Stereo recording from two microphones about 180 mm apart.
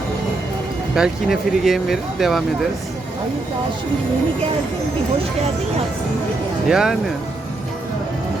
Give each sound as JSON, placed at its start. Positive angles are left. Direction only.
{"t": 0.9, "sound": "speech", "side_deg": 0}
{"t": 6.7, "sound": "speech", "side_deg": -5}